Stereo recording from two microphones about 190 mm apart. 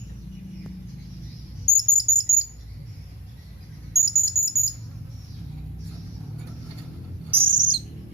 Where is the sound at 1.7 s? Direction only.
15° left (ahead or behind).